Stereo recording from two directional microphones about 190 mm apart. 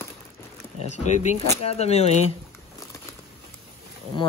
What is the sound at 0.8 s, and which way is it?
Speech, 35° left (ahead or behind).